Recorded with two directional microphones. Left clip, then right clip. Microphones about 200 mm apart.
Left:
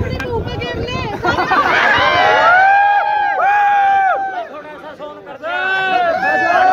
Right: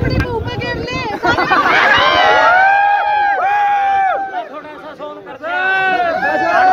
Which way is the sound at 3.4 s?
40° left (ahead or behind).